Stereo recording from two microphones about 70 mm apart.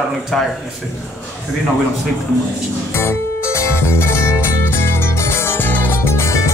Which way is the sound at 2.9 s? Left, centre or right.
Left.